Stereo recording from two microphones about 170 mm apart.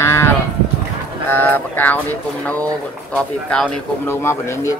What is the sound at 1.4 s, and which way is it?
Speech, 10° left (ahead or behind).